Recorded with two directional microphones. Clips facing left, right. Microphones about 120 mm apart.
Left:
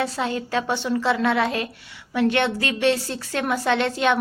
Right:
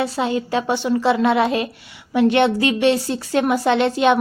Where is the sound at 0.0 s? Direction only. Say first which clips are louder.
Right 4 dB; 15° right (ahead or behind).